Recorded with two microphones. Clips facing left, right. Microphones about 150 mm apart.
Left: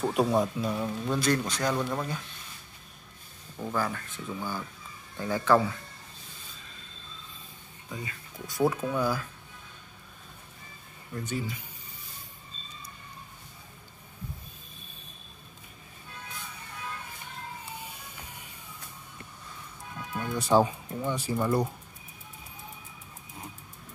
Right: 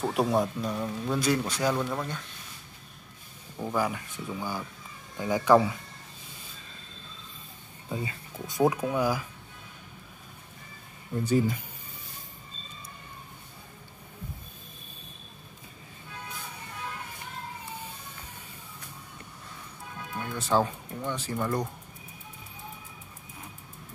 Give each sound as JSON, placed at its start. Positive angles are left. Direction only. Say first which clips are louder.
{"t": 0.0, "sound": "speech", "louder": "even", "side_deg": 0}
{"t": 3.5, "sound": "speech", "louder": "right 2 dB", "side_deg": -15}
{"t": 7.9, "sound": "speech", "louder": "right 5 dB", "side_deg": -25}
{"t": 11.2, "sound": "speech", "louder": "right 10 dB", "side_deg": -45}
{"t": 20.2, "sound": "speech", "louder": "left 3 dB", "side_deg": 15}